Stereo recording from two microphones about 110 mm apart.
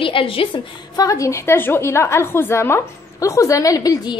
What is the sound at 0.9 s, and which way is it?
A woman's voice, 30° left (ahead or behind).